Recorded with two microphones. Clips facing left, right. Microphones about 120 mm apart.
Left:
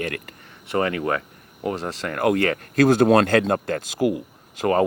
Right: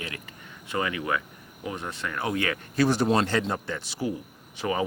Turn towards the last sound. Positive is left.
turn(degrees=55)  # may be behind; listen again after turning